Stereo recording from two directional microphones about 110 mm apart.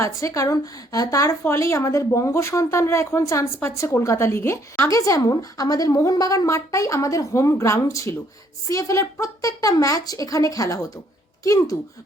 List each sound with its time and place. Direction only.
0.0 s a woman's voice: 30° left (ahead or behind)